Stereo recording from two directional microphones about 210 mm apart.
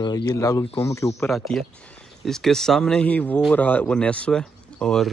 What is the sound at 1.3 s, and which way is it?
Speech, centre (ahead or behind).